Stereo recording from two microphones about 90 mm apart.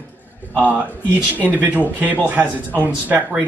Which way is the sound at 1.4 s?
20° right (ahead or behind).